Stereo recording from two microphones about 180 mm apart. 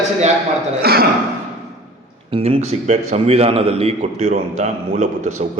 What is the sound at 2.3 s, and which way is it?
A man's voice, 35° right (ahead or behind).